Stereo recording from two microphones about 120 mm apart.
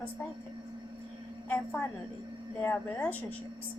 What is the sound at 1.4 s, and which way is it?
A woman's voice, 15° left (ahead or behind).